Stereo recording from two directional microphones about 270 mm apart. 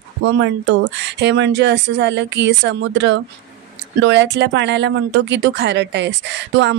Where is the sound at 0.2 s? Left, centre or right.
Right.